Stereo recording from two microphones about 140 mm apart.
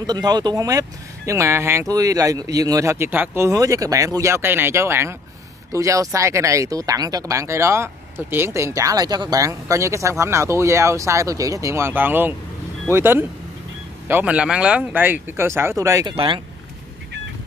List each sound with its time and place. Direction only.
0.0 s speech: 30° right (ahead or behind)
16.1 s speech: 35° right (ahead or behind)